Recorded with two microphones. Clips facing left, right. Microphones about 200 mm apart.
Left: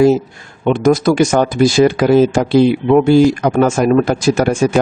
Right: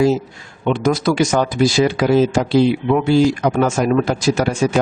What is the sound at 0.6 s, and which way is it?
Speech, 50° left (ahead or behind).